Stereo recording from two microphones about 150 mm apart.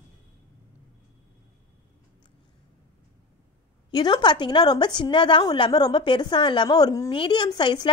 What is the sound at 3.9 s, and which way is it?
A woman's voice, 30° left (ahead or behind).